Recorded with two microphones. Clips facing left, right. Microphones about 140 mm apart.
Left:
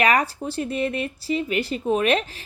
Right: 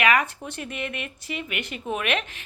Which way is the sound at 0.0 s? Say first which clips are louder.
Left 2 dB; 35° left (ahead or behind).